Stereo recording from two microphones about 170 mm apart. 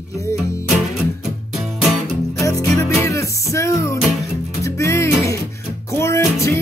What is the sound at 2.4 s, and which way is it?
Music, 20° left (ahead or behind).